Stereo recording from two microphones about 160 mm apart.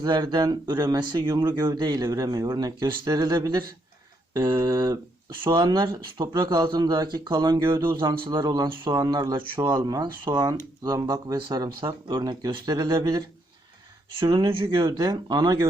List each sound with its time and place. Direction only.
0.0 s speech: 25° right (ahead or behind)
8.0 s speech: 30° right (ahead or behind)